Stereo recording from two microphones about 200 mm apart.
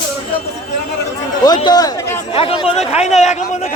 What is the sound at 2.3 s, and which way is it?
A man's voice, 25° left (ahead or behind).